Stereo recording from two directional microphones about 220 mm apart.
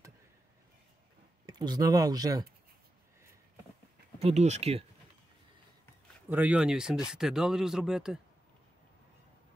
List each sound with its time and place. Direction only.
1.4 s speech: 20° right (ahead or behind)
4.2 s speech: 30° right (ahead or behind)
6.3 s speech: 5° right (ahead or behind)